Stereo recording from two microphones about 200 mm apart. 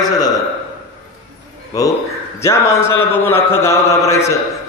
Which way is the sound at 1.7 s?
15° left (ahead or behind).